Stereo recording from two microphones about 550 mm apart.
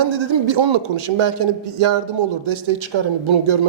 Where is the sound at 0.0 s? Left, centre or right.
Right.